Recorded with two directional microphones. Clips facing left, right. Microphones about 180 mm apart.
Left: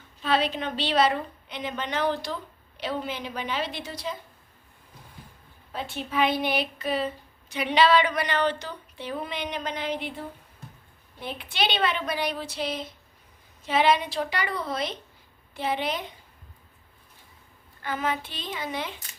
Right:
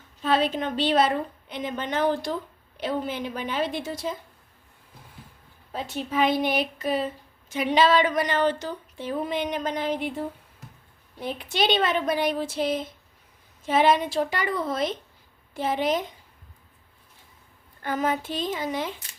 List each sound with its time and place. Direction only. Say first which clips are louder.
0.2 s speech: right 2 dB; 45° right (ahead or behind)
5.7 s speech: right 2 dB; 40° right (ahead or behind)
11.2 s speech: right 3 dB; 40° right (ahead or behind)
17.8 s speech: right 3 dB; 45° right (ahead or behind)